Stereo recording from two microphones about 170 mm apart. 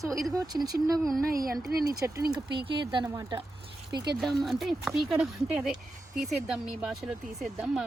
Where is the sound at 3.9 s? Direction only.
75° right (ahead or behind).